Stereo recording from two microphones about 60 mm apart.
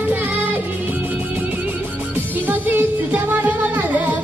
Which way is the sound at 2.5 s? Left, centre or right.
Right.